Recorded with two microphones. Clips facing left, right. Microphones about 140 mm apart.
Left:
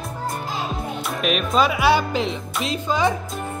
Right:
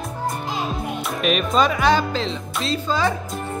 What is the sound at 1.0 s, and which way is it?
Speech, centre (ahead or behind).